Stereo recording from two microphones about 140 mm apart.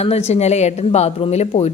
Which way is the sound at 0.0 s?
50° left (ahead or behind).